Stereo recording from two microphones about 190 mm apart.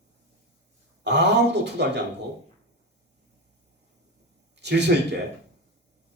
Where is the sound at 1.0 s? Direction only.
65° right (ahead or behind).